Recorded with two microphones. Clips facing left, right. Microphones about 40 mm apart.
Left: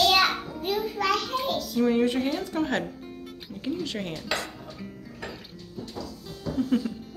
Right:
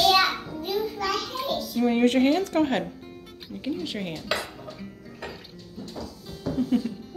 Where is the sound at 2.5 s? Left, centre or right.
Right.